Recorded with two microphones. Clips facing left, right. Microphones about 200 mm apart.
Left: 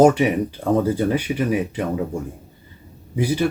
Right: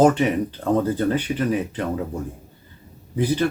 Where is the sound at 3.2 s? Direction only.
10° left (ahead or behind).